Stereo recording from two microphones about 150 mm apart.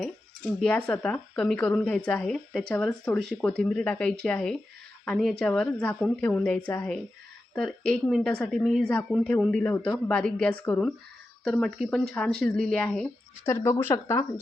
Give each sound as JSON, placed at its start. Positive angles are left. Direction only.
{"t": 0.0, "sound": "a woman's voice", "side_deg": 5}